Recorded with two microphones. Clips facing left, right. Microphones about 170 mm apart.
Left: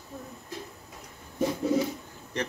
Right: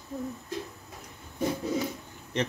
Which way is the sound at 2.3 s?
20° right (ahead or behind).